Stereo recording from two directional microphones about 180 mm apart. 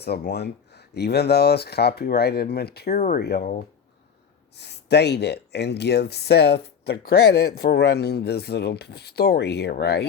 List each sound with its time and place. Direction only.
0.0 s speech: 65° left (ahead or behind)
2.9 s speech: 40° left (ahead or behind)
3.2 s speech: 60° left (ahead or behind)
4.5 s speech: 70° left (ahead or behind)